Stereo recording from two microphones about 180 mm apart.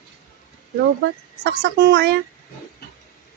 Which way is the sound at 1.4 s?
65° right (ahead or behind).